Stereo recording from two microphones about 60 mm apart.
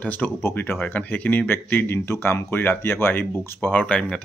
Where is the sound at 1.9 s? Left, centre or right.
Left.